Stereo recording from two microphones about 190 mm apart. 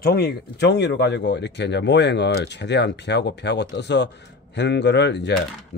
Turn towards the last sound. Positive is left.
turn(degrees=65)  # may be behind; listen again after turning